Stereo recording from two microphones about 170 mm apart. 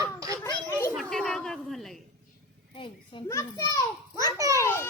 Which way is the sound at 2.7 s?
30° left (ahead or behind).